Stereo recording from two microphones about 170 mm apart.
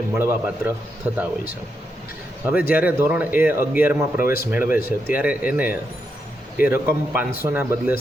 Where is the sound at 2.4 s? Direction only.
10° right (ahead or behind).